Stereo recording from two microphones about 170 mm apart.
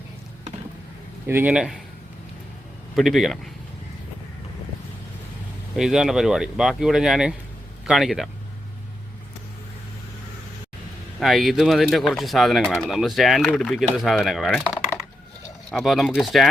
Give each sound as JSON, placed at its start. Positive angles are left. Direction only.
{"t": 1.3, "sound": "speech", "side_deg": -10}
{"t": 2.9, "sound": "speech", "side_deg": 0}
{"t": 5.7, "sound": "speech", "side_deg": -5}
{"t": 11.2, "sound": "speech", "side_deg": 0}